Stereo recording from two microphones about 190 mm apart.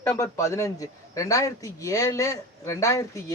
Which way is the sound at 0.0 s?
15° left (ahead or behind).